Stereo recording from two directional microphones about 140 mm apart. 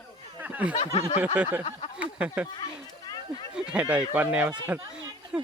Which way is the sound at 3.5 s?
5° right (ahead or behind).